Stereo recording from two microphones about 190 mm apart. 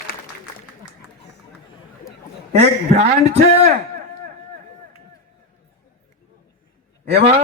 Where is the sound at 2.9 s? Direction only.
35° right (ahead or behind).